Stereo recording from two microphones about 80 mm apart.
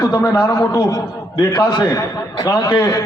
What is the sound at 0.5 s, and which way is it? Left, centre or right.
A man's voice, left.